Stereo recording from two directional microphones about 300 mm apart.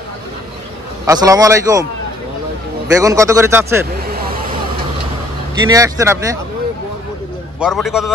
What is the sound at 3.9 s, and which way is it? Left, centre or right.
Vehicle, right.